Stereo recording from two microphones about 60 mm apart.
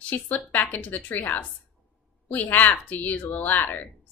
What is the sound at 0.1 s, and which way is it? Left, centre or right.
Speech, left.